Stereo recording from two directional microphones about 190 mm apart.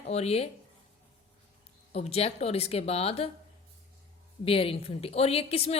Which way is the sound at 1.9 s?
35° left (ahead or behind).